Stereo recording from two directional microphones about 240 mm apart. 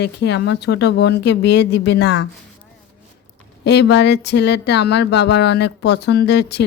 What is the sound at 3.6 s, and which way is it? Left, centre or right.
Speech, left.